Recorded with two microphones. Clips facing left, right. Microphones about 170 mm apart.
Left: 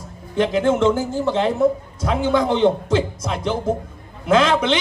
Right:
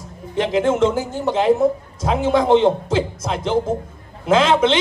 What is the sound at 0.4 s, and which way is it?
Speech, 25° right (ahead or behind).